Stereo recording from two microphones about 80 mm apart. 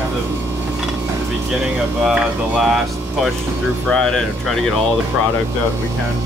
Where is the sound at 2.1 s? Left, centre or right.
Centre.